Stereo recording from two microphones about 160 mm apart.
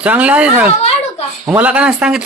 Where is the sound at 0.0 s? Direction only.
10° right (ahead or behind).